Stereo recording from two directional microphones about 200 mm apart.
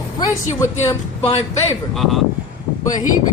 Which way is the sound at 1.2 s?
25° left (ahead or behind).